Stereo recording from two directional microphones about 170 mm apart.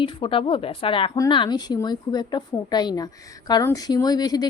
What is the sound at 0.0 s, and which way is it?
A woman's voice, 30° left (ahead or behind).